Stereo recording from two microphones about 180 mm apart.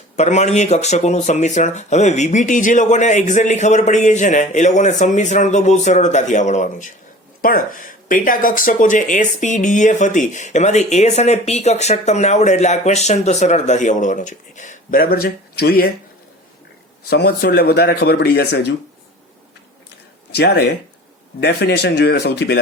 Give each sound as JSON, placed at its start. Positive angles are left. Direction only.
{"t": 0.2, "sound": "speech", "side_deg": 40}
{"t": 17.1, "sound": "speech", "side_deg": 60}
{"t": 20.3, "sound": "speech", "side_deg": 65}